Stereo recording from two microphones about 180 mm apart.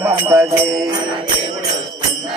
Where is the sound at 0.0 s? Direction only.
15° right (ahead or behind).